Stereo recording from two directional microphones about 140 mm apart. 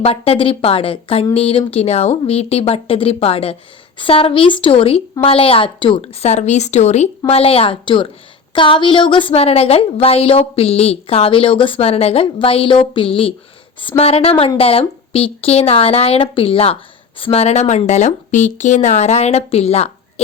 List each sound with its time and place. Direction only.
0.0 s speech: 45° left (ahead or behind)